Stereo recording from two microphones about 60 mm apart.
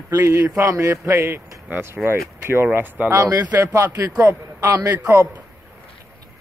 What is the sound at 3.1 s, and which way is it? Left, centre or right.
Speech, right.